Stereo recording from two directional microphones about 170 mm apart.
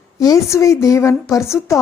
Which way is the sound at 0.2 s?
20° left (ahead or behind).